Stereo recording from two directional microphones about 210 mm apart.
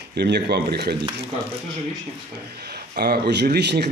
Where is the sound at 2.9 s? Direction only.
50° right (ahead or behind).